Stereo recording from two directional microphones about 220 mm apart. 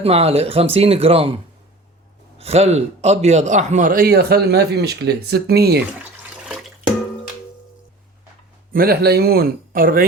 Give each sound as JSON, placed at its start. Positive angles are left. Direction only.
{"t": 0.0, "sound": "speech", "side_deg": -25}
{"t": 2.4, "sound": "a man's voice", "side_deg": -30}
{"t": 8.7, "sound": "speech", "side_deg": -45}